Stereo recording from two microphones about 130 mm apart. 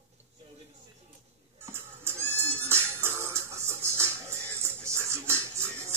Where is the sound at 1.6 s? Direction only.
20° right (ahead or behind).